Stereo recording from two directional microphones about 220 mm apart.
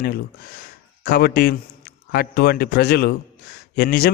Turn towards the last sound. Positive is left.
turn(degrees=45)  # may be behind; listen again after turning